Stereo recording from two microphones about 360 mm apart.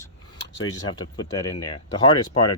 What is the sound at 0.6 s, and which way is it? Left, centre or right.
Speech, left.